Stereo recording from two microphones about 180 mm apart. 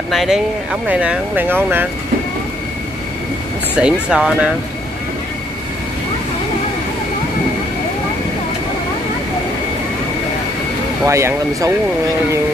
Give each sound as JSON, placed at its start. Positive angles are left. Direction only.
{"t": 0.1, "sound": "speech", "side_deg": 0}
{"t": 3.7, "sound": "speech", "side_deg": -5}
{"t": 11.1, "sound": "speech", "side_deg": -15}